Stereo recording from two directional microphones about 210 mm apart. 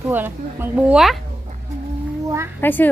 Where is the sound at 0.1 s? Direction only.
10° right (ahead or behind).